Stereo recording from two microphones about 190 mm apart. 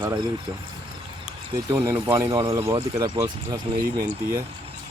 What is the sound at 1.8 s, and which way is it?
Speech, 15° right (ahead or behind).